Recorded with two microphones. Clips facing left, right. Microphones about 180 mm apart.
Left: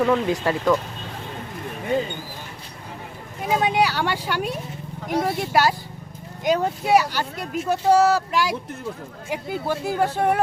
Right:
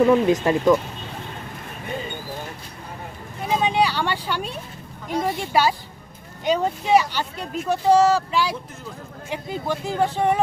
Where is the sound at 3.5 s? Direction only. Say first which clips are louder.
Even; 10° left (ahead or behind).